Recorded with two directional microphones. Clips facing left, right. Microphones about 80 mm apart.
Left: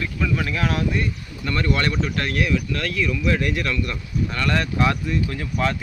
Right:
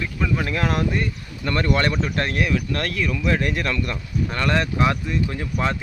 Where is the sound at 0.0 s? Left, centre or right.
Centre.